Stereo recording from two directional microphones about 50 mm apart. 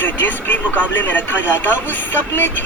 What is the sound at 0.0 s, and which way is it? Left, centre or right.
Speech, left.